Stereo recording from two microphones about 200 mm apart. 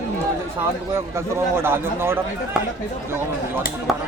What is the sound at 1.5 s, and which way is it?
Speech, 10° right (ahead or behind).